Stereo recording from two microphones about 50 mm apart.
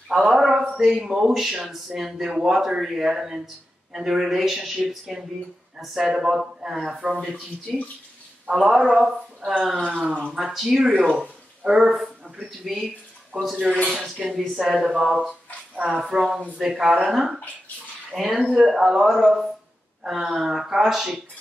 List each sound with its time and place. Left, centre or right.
0.3 s a man's voice: centre
8.5 s speech: right
8.7 s a man's voice: centre
9.8 s speech: right
10.3 s a man's voice: centre
10.9 s speech: right; by 12.8 s centre
13.3 s speech: right
14.2 s speech: centre
14.6 s a man's voice: centre
15.7 s speech: right
16.0 s a man's voice: centre
16.3 s speech: right
16.5 s a man's voice: centre